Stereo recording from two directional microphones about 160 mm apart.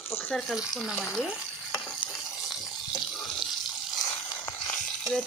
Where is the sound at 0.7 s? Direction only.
Centre (ahead or behind).